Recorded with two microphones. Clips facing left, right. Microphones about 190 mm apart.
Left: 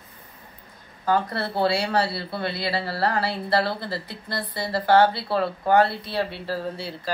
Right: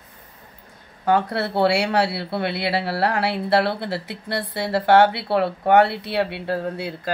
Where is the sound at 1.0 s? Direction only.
70° right (ahead or behind).